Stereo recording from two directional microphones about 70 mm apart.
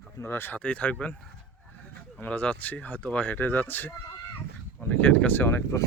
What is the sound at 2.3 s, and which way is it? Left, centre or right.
Speech, centre.